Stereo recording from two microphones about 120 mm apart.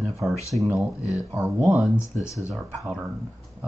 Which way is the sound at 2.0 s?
25° left (ahead or behind).